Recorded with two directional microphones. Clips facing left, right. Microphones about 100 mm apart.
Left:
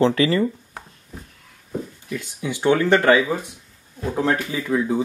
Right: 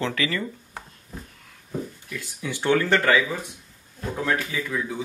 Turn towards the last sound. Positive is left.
turn(degrees=30)  # may be behind; listen again after turning